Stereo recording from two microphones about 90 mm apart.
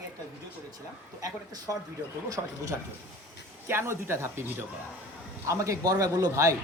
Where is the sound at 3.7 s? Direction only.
30° right (ahead or behind).